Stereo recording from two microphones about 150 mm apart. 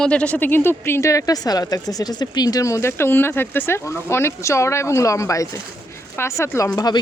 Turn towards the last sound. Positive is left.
turn(degrees=25)  # may be behind; listen again after turning